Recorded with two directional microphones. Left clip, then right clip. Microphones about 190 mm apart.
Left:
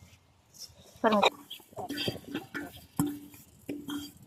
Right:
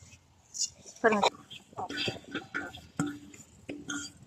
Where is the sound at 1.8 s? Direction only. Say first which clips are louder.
Even; 65° left (ahead or behind).